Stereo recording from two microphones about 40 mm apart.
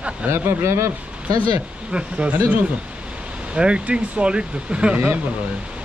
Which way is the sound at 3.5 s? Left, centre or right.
Right.